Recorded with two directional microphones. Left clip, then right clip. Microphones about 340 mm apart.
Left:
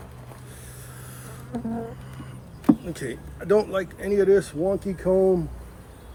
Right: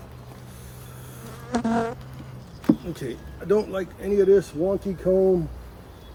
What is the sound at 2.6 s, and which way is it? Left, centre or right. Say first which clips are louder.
Speech: left 1 dB; centre.